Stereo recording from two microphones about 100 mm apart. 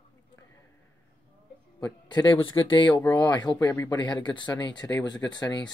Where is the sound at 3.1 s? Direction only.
45° left (ahead or behind).